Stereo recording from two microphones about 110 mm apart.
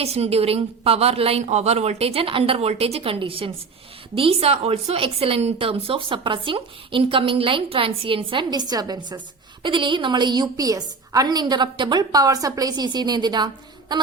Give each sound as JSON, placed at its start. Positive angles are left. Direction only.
{"t": 0.0, "sound": "a woman's voice", "side_deg": -70}
{"t": 9.6, "sound": "a woman's voice", "side_deg": -50}